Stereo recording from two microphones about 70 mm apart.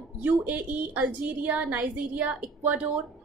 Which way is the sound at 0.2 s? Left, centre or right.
Right.